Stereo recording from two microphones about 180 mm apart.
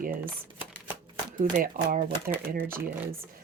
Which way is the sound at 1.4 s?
50° right (ahead or behind).